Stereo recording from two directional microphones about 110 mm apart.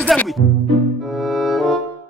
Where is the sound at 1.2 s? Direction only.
Centre (ahead or behind).